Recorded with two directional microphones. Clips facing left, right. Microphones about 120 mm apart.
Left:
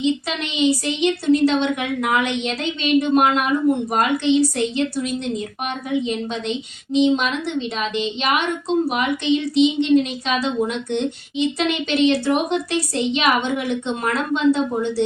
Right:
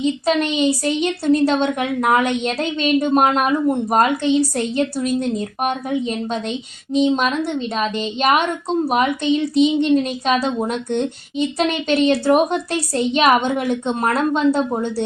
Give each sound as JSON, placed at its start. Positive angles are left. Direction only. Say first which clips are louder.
{"t": 0.0, "sound": "a woman's voice", "louder": "right 4 dB", "side_deg": -45}
{"t": 5.6, "sound": "a woman's voice", "louder": "right 1 dB", "side_deg": -45}